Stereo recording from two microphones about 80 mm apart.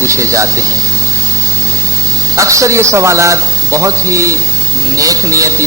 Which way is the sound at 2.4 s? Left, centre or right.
Right.